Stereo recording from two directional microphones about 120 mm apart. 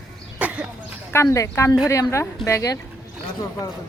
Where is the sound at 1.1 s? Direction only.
25° left (ahead or behind).